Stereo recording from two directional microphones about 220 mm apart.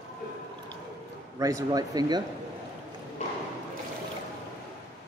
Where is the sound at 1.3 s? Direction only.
15° right (ahead or behind).